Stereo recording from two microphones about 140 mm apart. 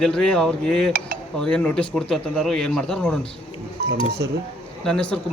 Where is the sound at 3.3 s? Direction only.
40° left (ahead or behind).